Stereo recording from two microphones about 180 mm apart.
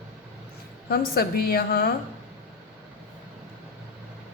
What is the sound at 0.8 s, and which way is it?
A woman's voice, 60° left (ahead or behind).